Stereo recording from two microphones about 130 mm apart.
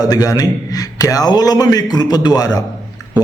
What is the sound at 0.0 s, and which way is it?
A man's voice, 30° left (ahead or behind).